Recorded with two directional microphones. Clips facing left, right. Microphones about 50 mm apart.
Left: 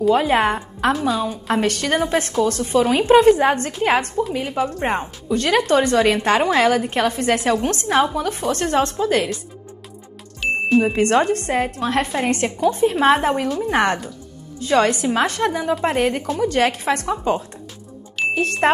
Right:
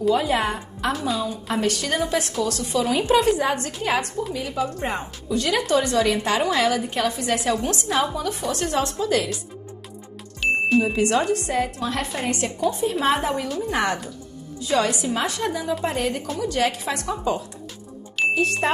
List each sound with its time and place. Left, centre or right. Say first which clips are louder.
0.1 s a woman's voice: left 5 dB; left
10.4 s music: even; centre
11.0 s a woman's voice: left 4 dB; left